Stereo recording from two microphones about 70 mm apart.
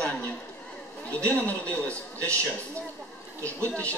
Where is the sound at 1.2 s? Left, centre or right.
Centre.